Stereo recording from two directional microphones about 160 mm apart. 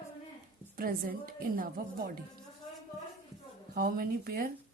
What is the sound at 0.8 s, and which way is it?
A woman's voice, 65° right (ahead or behind).